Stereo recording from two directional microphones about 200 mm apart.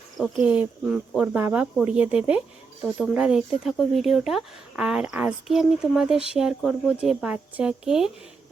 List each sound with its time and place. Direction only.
0.2 s speech: 5° right (ahead or behind)